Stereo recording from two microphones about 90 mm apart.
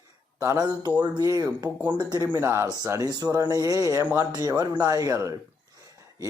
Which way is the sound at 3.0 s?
45° right (ahead or behind).